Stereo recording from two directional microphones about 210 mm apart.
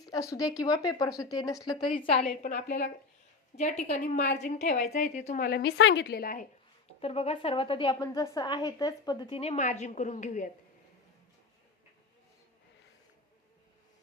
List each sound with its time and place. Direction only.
0.0 s speech: 15° left (ahead or behind)
2.4 s a woman's voice: 40° left (ahead or behind)
7.0 s a woman's voice: 30° left (ahead or behind)